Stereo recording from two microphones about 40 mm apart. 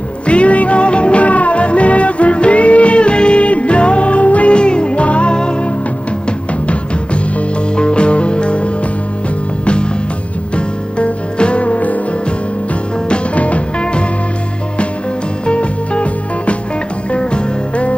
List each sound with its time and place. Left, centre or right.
0.3 s music: left
7.7 s music: left
10.5 s music: left
13.1 s music: left
15.4 s music: left